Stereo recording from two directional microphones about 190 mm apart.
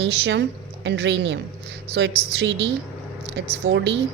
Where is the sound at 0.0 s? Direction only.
65° right (ahead or behind).